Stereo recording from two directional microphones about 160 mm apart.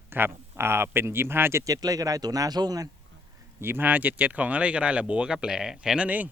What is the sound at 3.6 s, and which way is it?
Speech, 15° right (ahead or behind).